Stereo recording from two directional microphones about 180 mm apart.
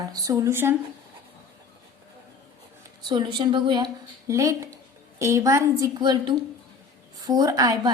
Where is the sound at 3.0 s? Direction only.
25° right (ahead or behind).